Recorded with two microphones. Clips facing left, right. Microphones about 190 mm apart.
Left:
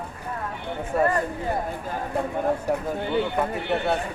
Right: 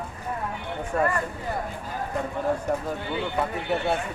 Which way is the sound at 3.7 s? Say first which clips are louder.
Left 1 dB; centre (ahead or behind).